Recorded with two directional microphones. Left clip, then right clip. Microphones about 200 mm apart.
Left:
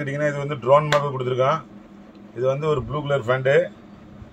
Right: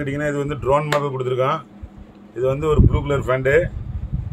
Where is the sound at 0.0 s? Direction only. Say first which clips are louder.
Right 1 dB; 50° right (ahead or behind).